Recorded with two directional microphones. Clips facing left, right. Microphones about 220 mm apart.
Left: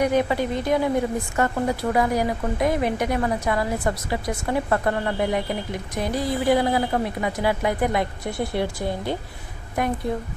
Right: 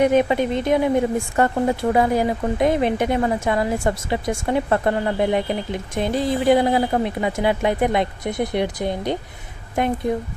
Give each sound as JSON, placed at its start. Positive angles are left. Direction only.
{"t": 0.0, "sound": "a woman's voice", "side_deg": -20}